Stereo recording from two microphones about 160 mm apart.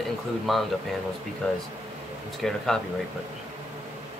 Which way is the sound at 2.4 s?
5° left (ahead or behind).